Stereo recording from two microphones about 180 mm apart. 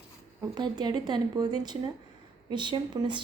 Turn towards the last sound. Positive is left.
turn(degrees=-25)  # may be behind; listen again after turning